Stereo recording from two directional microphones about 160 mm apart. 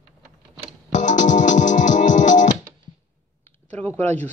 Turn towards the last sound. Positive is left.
turn(degrees=10)  # may be behind; listen again after turning